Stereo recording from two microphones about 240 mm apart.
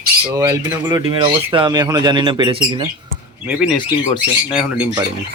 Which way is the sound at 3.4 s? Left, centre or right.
Centre.